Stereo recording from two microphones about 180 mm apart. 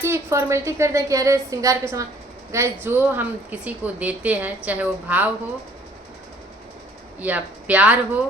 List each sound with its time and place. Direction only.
0.0 s speech: 15° right (ahead or behind)
7.2 s speech: 10° right (ahead or behind)